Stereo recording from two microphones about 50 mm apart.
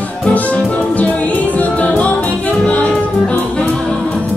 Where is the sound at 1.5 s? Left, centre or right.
Left.